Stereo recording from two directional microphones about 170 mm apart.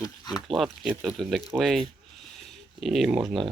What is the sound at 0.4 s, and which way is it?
Speech, centre (ahead or behind).